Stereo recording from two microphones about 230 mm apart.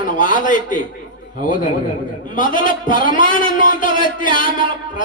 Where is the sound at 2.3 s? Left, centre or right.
Left.